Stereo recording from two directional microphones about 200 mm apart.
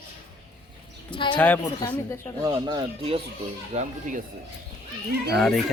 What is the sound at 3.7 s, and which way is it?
Speech, 40° right (ahead or behind).